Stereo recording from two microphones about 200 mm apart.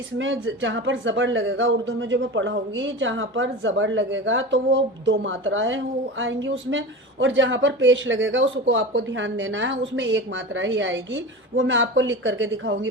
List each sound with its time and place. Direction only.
0.2 s speech: 75° right (ahead or behind)